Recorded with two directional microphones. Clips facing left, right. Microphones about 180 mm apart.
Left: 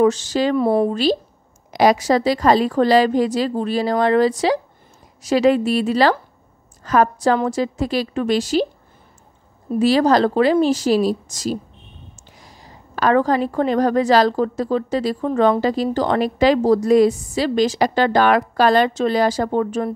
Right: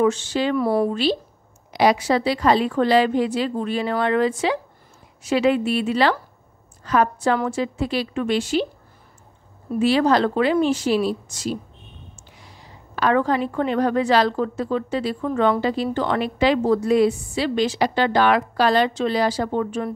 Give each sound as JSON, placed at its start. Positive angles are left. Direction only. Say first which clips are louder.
{"t": 0.0, "sound": "a woman's voice", "louder": "left 3 dB", "side_deg": 40}
{"t": 0.6, "sound": "speech", "louder": "left 3 dB", "side_deg": 25}
{"t": 1.7, "sound": "a woman's voice", "louder": "left 3 dB", "side_deg": 45}
{"t": 9.8, "sound": "a woman's voice", "louder": "left 3 dB", "side_deg": 40}